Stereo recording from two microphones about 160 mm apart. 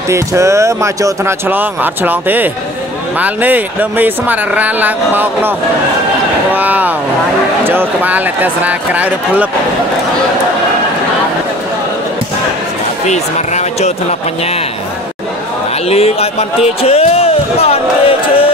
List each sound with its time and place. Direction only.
0.1 s speech: 20° right (ahead or behind)
6.5 s speech: 10° right (ahead or behind)
13.1 s a sound: 45° left (ahead or behind)
15.9 s speech: 40° left (ahead or behind)